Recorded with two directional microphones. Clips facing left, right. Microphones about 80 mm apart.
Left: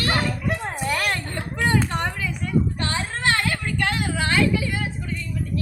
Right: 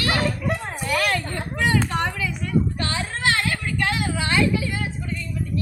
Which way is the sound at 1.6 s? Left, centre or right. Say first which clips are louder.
Even; left.